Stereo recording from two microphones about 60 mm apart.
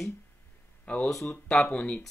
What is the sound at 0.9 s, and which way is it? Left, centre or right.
Speech, centre.